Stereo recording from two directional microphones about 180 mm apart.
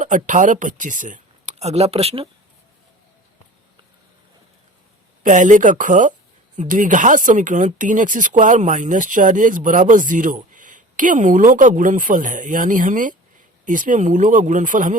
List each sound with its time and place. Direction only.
0.0 s speech: 45° right (ahead or behind)
5.2 s speech: 45° right (ahead or behind)